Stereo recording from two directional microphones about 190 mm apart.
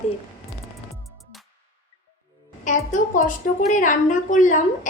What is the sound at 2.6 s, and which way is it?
A woman's voice, 40° left (ahead or behind).